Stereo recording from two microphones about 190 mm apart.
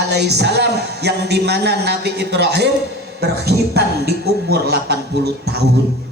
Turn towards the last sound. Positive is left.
turn(degrees=-60)  # may be behind; listen again after turning